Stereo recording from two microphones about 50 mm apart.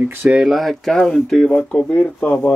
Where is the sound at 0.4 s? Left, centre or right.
Centre.